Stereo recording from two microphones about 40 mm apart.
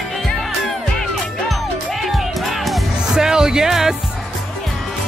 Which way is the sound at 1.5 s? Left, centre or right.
Centre.